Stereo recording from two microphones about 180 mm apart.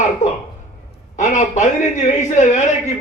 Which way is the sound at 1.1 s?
40° left (ahead or behind).